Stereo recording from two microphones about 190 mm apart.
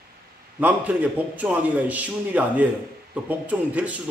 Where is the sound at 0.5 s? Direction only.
10° right (ahead or behind).